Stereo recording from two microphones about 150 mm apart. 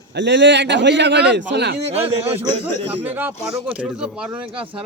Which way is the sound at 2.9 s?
10° right (ahead or behind).